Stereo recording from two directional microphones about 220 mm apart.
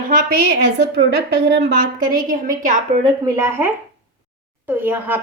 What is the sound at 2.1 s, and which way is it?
Speech, 40° right (ahead or behind).